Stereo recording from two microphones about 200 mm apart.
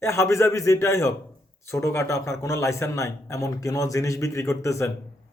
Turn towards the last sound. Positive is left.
turn(degrees=15)  # may be behind; listen again after turning